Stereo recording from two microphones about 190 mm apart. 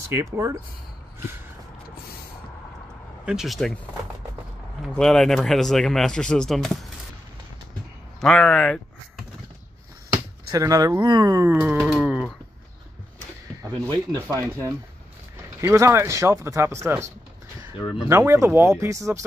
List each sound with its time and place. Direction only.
0.1 s speech: 15° right (ahead or behind)
3.3 s speech: centre (ahead or behind)
4.8 s speech: centre (ahead or behind)
8.2 s speech: 5° left (ahead or behind)
10.0 s speech: 20° right (ahead or behind)
14.2 s speech: 15° right (ahead or behind)
17.7 s speech: 25° left (ahead or behind)
18.0 s speech: 15° right (ahead or behind)